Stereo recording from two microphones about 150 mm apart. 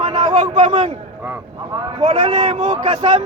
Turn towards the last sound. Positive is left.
turn(degrees=-50)  # may be behind; listen again after turning